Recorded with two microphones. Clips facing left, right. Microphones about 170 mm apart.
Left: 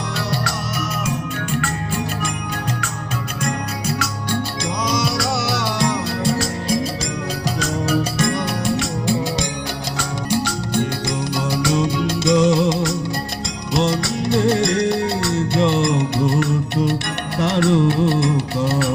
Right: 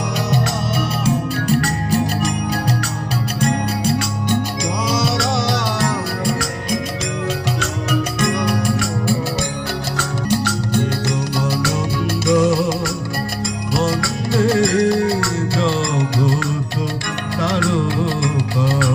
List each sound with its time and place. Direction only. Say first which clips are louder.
1.0 s music: right 6 dB; 40° right (ahead or behind)
3.4 s music: right 6 dB; 30° right (ahead or behind)
5.0 s music: right 2 dB; centre (ahead or behind)
5.8 s music: even; 25° left (ahead or behind)
17.6 s music of bollywood: left 7 dB; 20° left (ahead or behind)